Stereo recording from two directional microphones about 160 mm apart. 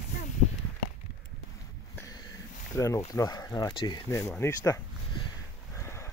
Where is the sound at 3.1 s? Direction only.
20° left (ahead or behind).